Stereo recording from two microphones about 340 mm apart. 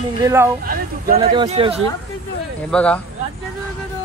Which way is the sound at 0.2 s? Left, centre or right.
Centre.